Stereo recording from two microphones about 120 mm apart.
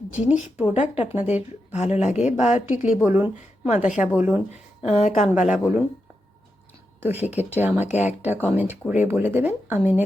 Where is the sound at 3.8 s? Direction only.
90° left.